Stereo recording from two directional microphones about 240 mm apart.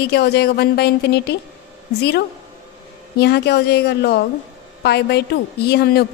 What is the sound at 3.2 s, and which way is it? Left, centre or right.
A woman's voice, left.